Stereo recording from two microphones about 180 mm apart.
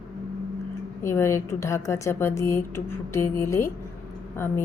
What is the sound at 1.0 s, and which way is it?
A woman's voice, 15° left (ahead or behind).